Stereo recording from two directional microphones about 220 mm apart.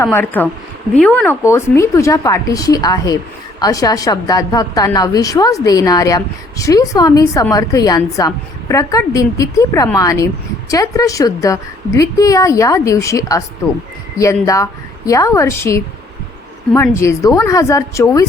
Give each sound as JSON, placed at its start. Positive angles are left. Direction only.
{"t": 0.0, "sound": "a woman's voice", "side_deg": 10}